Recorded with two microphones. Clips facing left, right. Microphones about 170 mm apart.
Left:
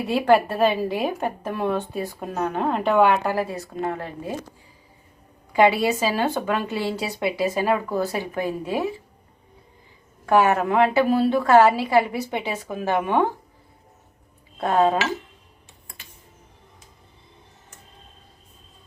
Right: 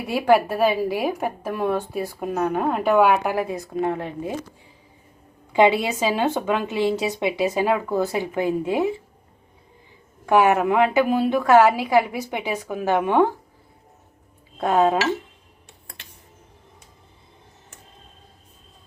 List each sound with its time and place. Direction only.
0.1 s a woman's voice: 5° right (ahead or behind)
5.5 s a woman's voice: 20° right (ahead or behind)
10.2 s a woman's voice: 15° right (ahead or behind)
14.6 s a woman's voice: 15° right (ahead or behind)